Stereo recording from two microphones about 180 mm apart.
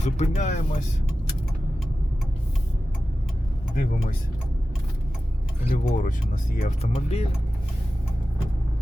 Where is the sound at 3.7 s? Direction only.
50° left (ahead or behind).